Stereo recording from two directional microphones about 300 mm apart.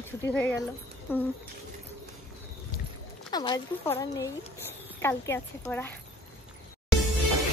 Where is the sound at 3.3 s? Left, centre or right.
Centre.